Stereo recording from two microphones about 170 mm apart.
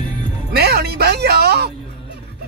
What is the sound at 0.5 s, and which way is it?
Speech, 70° right (ahead or behind).